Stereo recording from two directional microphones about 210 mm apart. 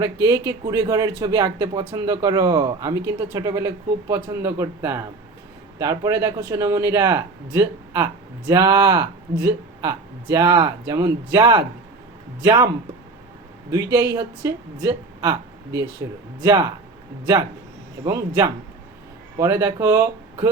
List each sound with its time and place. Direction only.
0.0 s speech: 20° right (ahead or behind)
13.7 s speech: 15° right (ahead or behind)
18.0 s speech: 20° right (ahead or behind)